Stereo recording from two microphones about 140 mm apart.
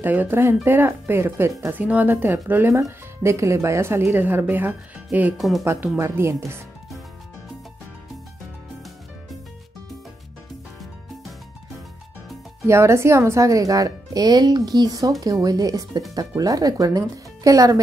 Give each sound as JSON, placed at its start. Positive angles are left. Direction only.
{"t": 0.0, "sound": "speech", "side_deg": -15}
{"t": 12.6, "sound": "speech", "side_deg": -20}